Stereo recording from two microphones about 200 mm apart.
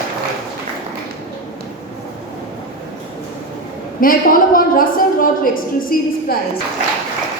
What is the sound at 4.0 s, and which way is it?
A woman's voice, 45° left (ahead or behind).